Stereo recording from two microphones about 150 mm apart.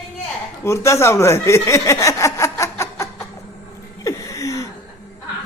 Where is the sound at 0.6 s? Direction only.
20° left (ahead or behind).